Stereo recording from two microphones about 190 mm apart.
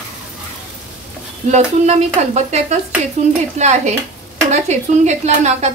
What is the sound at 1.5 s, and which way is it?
Stir, 35° right (ahead or behind).